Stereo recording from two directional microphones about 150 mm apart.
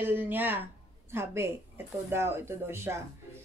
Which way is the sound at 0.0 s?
15° right (ahead or behind).